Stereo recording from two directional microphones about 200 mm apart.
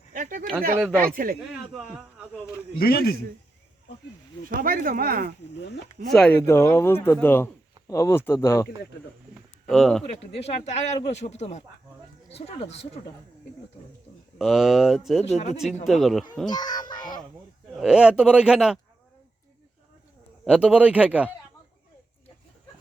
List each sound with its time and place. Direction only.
0.1 s a sound: 40° right (ahead or behind)
0.8 s a man's voice: 5° right (ahead or behind)
1.1 s speech: 45° right (ahead or behind)
1.7 s a man's voice: centre (ahead or behind)
2.7 s a man's voice: 50° left (ahead or behind)
4.4 s speech: 45° right (ahead or behind)
6.1 s speech: 5° left (ahead or behind)
9.3 s bird: centre (ahead or behind)
10.0 s speech: 30° left (ahead or behind)
14.3 s a man's voice: centre (ahead or behind)
16.5 s a child's voice: 20° left (ahead or behind)
17.7 s a man's voice: 5° right (ahead or behind)
20.4 s speech: 5° right (ahead or behind)